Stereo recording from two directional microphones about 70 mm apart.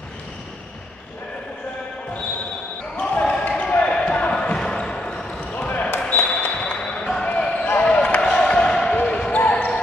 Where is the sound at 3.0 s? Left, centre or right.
Centre.